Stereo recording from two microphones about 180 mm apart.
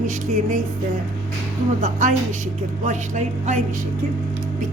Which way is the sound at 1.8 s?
45° right (ahead or behind).